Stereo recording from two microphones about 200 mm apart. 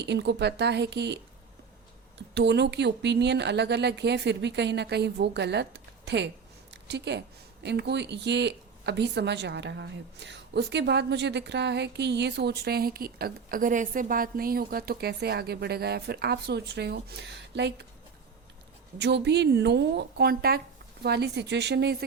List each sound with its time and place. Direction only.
0.0 s speech: 60° right (ahead or behind)
2.3 s speech: 60° right (ahead or behind)
18.9 s speech: 60° right (ahead or behind)